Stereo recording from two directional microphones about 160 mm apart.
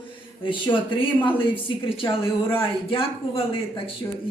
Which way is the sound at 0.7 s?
30° left (ahead or behind).